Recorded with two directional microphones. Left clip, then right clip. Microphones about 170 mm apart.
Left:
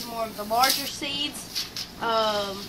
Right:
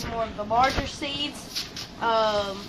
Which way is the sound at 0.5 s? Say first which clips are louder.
Even; 5° left (ahead or behind).